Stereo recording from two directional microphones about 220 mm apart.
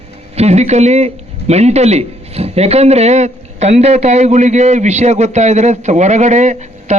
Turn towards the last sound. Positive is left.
turn(degrees=-30)  # may be behind; listen again after turning